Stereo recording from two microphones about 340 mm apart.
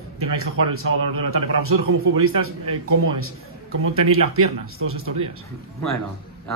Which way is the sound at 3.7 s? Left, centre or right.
Right.